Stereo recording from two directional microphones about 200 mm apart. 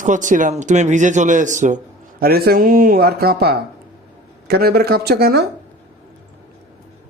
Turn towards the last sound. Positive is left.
turn(degrees=-55)  # may be behind; listen again after turning